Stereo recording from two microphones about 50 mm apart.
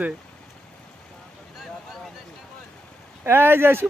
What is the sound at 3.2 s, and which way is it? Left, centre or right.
Speech, right.